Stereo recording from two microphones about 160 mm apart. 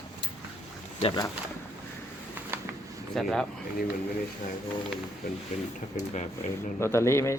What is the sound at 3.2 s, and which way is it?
Speech, centre (ahead or behind).